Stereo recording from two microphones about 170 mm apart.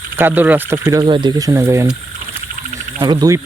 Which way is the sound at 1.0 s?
25° right (ahead or behind).